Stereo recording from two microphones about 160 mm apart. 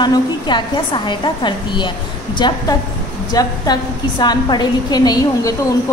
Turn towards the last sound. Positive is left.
turn(degrees=25)  # may be behind; listen again after turning